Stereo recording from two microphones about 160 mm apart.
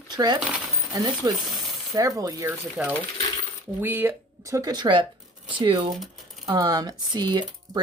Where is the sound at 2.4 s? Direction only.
10° right (ahead or behind).